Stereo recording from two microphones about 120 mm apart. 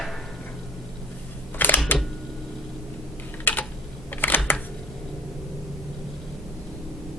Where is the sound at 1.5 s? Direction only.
15° left (ahead or behind).